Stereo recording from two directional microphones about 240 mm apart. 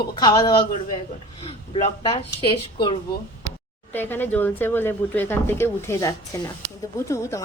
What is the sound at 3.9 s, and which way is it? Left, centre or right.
Speech, centre.